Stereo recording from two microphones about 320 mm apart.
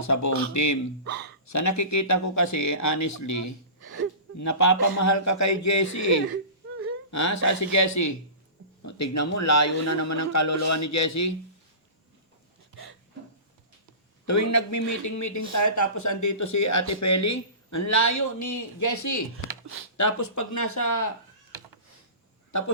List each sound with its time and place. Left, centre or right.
0.0 s speech: left
14.3 s speech: left